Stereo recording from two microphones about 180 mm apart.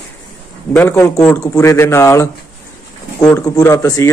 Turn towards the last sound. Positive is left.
turn(degrees=15)  # may be behind; listen again after turning